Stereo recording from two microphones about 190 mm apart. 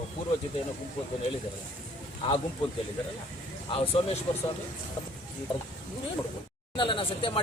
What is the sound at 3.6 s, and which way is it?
Speech, 30° left (ahead or behind).